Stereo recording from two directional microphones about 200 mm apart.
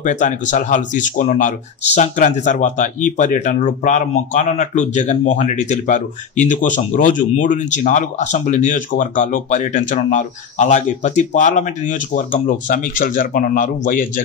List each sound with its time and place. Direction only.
0.0 s speech: 40° left (ahead or behind)